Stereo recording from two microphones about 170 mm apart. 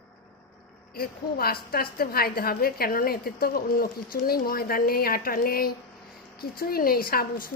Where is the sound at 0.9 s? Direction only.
60° left (ahead or behind).